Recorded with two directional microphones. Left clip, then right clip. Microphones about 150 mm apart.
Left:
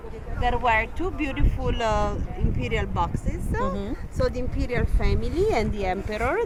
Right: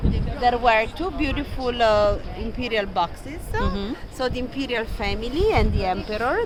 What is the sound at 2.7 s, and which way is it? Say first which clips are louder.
Speech: right 4 dB; 35° right (ahead or behind).